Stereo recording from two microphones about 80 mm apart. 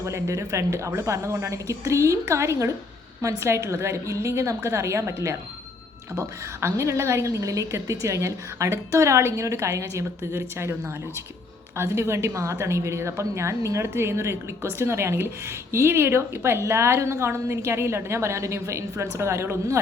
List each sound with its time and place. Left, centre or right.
0.0 s a woman's voice: right
11.8 s a woman's voice: right